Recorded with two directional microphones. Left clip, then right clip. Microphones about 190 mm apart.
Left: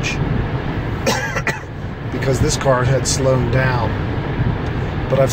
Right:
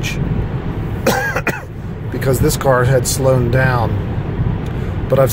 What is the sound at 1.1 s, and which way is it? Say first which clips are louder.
Cough: right 3 dB; 45° right (ahead or behind).